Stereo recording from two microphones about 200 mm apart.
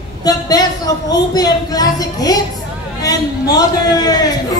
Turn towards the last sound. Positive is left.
turn(degrees=20)  # may be behind; listen again after turning